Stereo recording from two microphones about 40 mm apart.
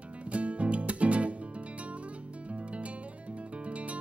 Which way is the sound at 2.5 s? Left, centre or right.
Right.